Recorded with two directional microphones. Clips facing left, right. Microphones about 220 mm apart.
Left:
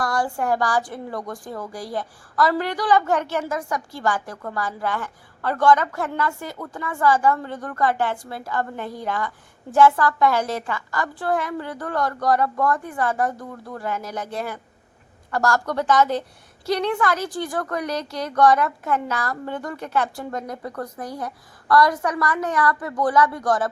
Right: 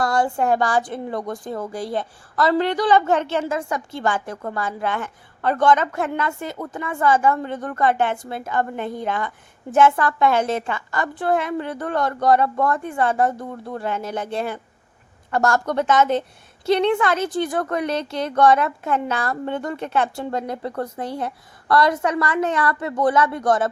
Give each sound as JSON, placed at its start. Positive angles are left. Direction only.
{"t": 0.0, "sound": "a woman's voice", "side_deg": -25}